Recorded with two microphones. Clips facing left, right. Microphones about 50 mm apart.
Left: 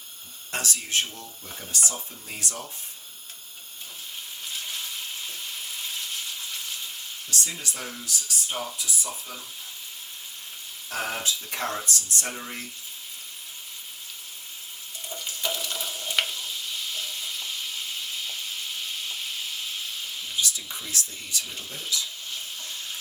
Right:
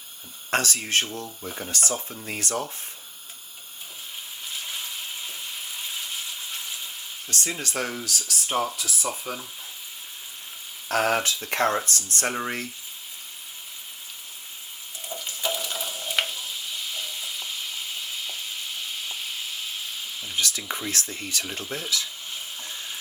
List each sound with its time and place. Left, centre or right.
0.5 s speech: right
1.7 s speech: right
4.4 s frying: centre
7.3 s speech: right
8.0 s speech: right
9.3 s speech: right
10.8 s speech: right
15.0 s frying: centre
16.9 s stir: centre
20.3 s a sound: right
20.9 s speech: right
22.3 s stir: centre